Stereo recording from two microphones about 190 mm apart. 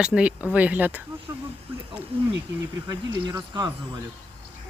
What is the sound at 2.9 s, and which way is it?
Speech, 20° right (ahead or behind).